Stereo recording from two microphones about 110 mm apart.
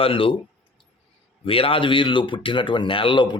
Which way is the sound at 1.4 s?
55° left (ahead or behind).